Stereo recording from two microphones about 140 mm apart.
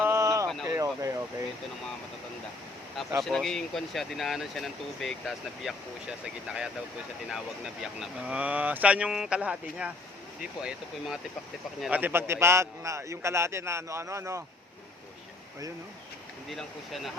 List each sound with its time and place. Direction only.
0.0 s a sound: 20° right (ahead or behind)
3.2 s a man's voice: 5° left (ahead or behind); by 14.4 s 20° right (ahead or behind)
16.5 s speech: centre (ahead or behind)